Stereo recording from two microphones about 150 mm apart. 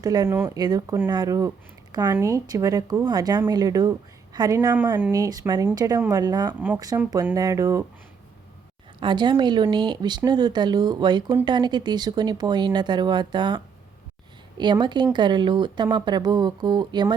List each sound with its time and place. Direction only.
0.0 s speech: 25° right (ahead or behind)
6.5 s speech: 10° right (ahead or behind)
6.7 s speech: 25° right (ahead or behind)
9.0 s speech: 30° right (ahead or behind)
14.6 s speech: 30° right (ahead or behind)